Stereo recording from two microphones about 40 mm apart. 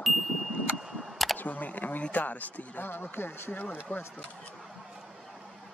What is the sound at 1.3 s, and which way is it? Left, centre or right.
Speech, left.